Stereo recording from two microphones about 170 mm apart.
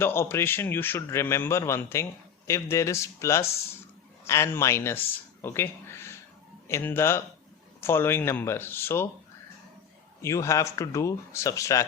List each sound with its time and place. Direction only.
0.0 s a man's voice: 15° left (ahead or behind)
10.2 s a man's voice: 20° left (ahead or behind)